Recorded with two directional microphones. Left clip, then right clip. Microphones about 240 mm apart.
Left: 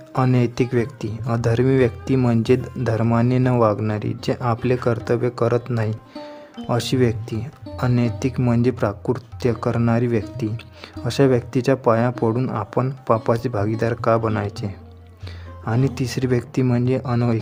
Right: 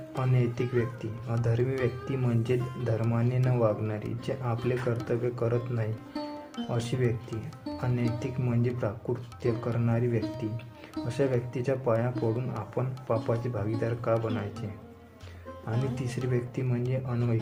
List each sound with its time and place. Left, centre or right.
0.2 s speech: left
15.6 s speech: left